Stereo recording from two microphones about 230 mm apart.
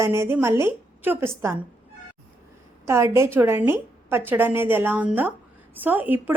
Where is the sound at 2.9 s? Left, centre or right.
Centre.